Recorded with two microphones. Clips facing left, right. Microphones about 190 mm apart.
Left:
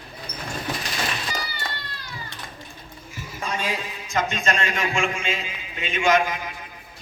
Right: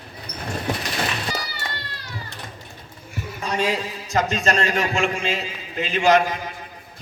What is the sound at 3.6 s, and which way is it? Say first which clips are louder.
A man's voice: right 6 dB; 35° right (ahead or behind).